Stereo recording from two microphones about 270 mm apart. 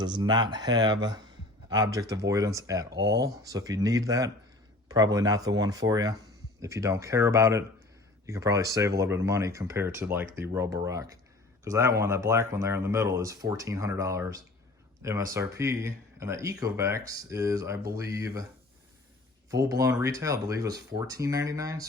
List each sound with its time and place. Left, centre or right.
0.0 s speech: centre
19.5 s speech: centre